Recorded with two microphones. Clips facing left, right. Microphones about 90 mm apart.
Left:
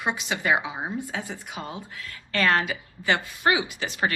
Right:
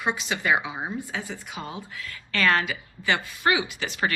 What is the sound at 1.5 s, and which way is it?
A woman's voice, 40° left (ahead or behind).